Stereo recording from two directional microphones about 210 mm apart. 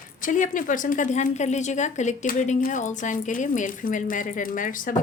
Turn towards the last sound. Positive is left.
turn(degrees=40)  # may be behind; listen again after turning